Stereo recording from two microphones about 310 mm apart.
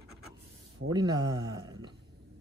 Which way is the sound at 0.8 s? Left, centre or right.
Right.